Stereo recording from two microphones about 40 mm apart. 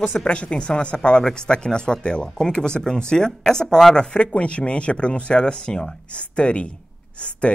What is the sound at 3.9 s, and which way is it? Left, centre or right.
Speech, left.